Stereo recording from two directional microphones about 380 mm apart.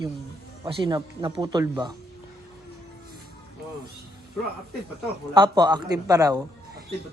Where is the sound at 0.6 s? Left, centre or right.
Centre.